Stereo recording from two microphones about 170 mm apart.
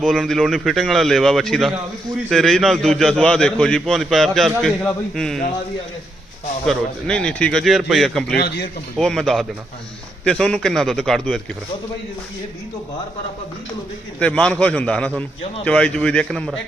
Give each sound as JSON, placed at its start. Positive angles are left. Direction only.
{"t": 0.0, "sound": "a man's voice", "side_deg": 0}
{"t": 6.7, "sound": "a man's voice", "side_deg": 5}
{"t": 8.4, "sound": "speech", "side_deg": 70}
{"t": 9.0, "sound": "a man's voice", "side_deg": 0}
{"t": 14.2, "sound": "a man's voice", "side_deg": 5}